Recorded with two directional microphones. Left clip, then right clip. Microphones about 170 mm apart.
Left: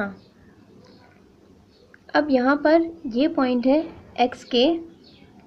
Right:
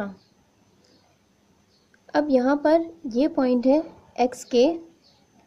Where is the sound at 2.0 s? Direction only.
50° right (ahead or behind).